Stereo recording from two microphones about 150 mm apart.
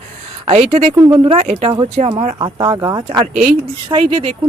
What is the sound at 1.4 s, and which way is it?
Speech, 45° right (ahead or behind).